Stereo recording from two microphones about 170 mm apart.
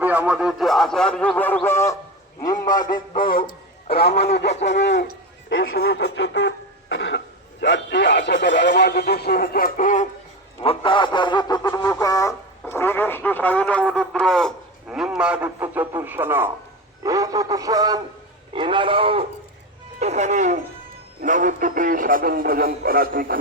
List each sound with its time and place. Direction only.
0.0 s a man's voice: 10° right (ahead or behind); by 2.8 s 25° left (ahead or behind)
3.3 s a man's voice: 65° left (ahead or behind)
4.8 s a man's voice: 90° left; by 10.1 s 50° left (ahead or behind)
10.6 s a man's voice: 30° left (ahead or behind); by 19.2 s 30° right (ahead or behind)
20.0 s a man's voice: 40° right (ahead or behind); by 23.4 s 60° right (ahead or behind)